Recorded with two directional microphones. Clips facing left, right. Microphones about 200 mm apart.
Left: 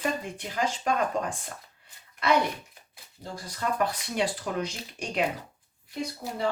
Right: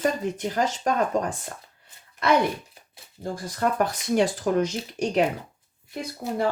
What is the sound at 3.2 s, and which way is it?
Speech, 50° right (ahead or behind).